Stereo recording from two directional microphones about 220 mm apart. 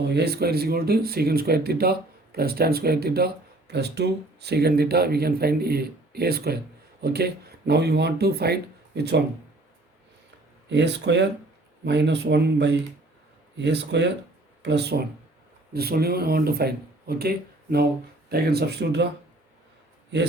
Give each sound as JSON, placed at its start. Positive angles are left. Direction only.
{"t": 0.0, "sound": "speech", "side_deg": -50}
{"t": 10.7, "sound": "speech", "side_deg": -50}